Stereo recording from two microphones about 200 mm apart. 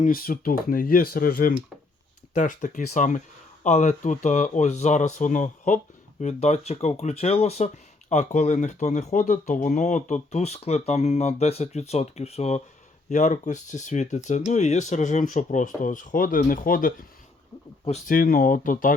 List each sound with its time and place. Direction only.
0.0 s speech: 45° left (ahead or behind)